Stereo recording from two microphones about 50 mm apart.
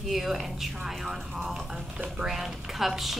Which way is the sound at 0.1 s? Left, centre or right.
Centre.